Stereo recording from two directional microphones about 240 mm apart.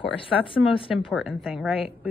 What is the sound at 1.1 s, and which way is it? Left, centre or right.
A woman's voice, centre.